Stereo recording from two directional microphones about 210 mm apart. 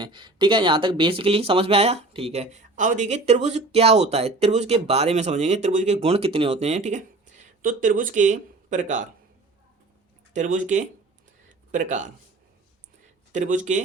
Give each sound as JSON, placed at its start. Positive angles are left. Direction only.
{"t": 0.0, "sound": "speech", "side_deg": -20}
{"t": 10.3, "sound": "speech", "side_deg": -35}
{"t": 13.3, "sound": "speech", "side_deg": -35}